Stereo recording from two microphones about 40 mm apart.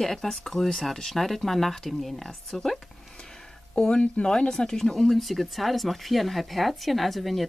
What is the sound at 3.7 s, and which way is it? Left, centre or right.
Speech, left.